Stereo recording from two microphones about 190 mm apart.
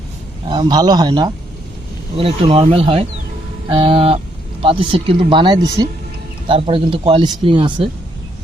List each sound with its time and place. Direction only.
0.4 s speech: 25° right (ahead or behind)